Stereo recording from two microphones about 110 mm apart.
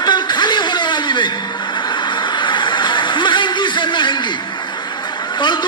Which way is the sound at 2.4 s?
45° left (ahead or behind).